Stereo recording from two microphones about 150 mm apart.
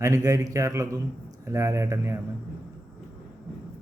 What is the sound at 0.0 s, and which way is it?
A man's voice, 20° right (ahead or behind).